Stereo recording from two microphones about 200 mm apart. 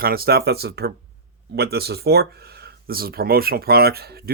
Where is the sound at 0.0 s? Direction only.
50° right (ahead or behind).